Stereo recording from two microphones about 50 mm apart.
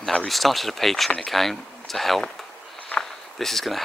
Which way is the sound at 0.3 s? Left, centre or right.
Centre.